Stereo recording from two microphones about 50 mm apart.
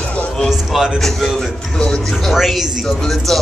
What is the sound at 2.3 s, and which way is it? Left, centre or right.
Music, centre.